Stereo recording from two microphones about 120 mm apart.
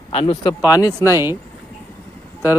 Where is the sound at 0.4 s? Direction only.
35° left (ahead or behind).